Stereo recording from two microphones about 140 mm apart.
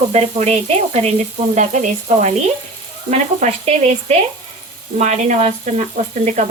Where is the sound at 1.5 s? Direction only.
60° right (ahead or behind).